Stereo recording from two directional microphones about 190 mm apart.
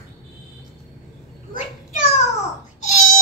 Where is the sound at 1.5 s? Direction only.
40° left (ahead or behind).